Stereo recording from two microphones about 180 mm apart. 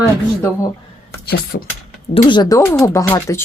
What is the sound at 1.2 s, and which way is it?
Speech, 60° left (ahead or behind).